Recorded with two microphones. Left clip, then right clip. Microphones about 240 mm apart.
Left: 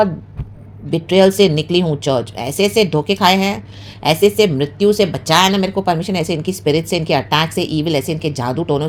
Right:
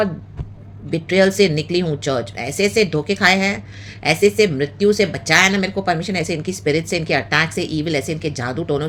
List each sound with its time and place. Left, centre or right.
0.9 s speech: centre